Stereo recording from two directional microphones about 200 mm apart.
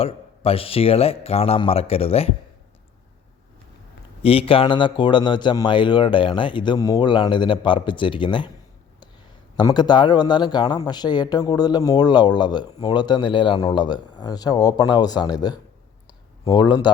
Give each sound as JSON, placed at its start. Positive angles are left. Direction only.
{"t": 0.0, "sound": "speech", "side_deg": 30}
{"t": 4.2, "sound": "speech", "side_deg": 30}
{"t": 9.6, "sound": "speech", "side_deg": 20}
{"t": 16.0, "sound": "a sound", "side_deg": 20}